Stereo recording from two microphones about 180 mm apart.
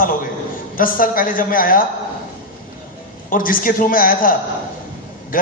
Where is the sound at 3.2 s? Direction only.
50° left (ahead or behind).